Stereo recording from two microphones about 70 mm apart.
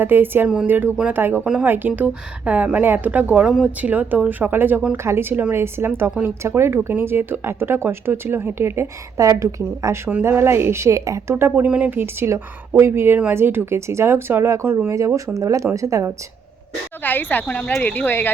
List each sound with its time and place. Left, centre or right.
0.0 s speech: right
0.4 s speech: centre
0.7 s speech: right
3.4 s speech: centre
3.8 s speech: right
10.2 s speech: right
11.3 s speech: right
11.6 s speech: right
14.9 s speech: right
17.0 s speech: left